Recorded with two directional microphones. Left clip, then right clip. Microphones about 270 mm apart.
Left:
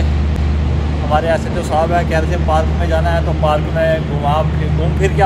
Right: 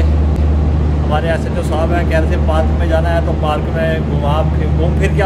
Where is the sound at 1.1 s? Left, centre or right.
Centre.